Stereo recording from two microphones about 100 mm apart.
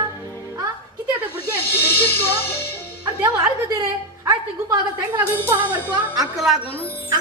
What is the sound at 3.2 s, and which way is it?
A woman's voice, 40° right (ahead or behind).